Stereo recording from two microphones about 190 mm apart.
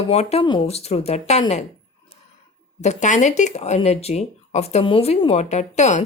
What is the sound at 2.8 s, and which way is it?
Speech, 40° left (ahead or behind).